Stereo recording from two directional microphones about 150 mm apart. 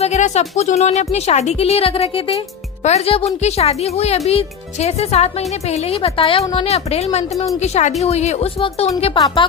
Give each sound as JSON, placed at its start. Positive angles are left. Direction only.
{"t": 0.0, "sound": "speech", "side_deg": 50}
{"t": 9.1, "sound": "a woman's voice", "side_deg": 30}